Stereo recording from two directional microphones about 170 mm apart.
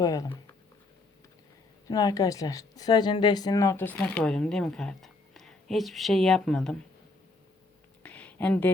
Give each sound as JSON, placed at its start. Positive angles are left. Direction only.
{"t": 0.0, "sound": "speech", "side_deg": 20}
{"t": 1.9, "sound": "speech", "side_deg": 25}
{"t": 8.0, "sound": "a sound", "side_deg": 10}